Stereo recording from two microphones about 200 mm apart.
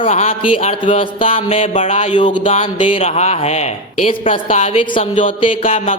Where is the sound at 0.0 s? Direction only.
35° left (ahead or behind).